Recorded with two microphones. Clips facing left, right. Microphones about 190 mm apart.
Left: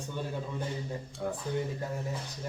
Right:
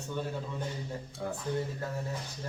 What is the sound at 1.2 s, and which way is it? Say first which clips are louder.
Speech: left 2 dB; centre (ahead or behind).